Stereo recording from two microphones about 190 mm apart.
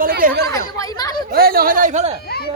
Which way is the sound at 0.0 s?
50° right (ahead or behind).